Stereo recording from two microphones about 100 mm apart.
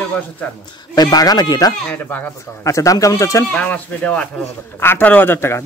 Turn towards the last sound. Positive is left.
turn(degrees=25)  # may be behind; listen again after turning